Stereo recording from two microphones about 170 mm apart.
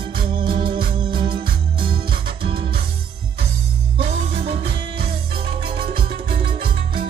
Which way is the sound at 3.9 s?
35° right (ahead or behind).